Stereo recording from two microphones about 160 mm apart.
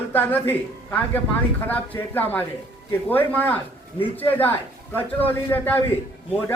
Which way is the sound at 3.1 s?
10° left (ahead or behind).